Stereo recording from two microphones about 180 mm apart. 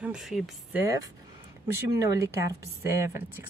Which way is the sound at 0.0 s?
5° right (ahead or behind).